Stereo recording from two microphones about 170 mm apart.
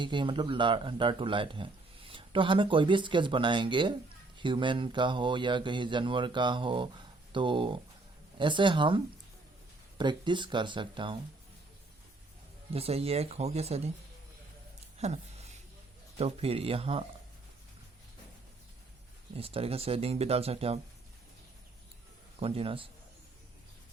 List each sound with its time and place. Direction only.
0.0 s speech: 30° right (ahead or behind)
10.0 s speech: 25° right (ahead or behind)
12.7 s speech: 35° right (ahead or behind)
14.9 s a sound: 40° right (ahead or behind)
16.1 s speech: 35° right (ahead or behind)
19.3 s speech: 35° right (ahead or behind)
22.4 s speech: 35° right (ahead or behind)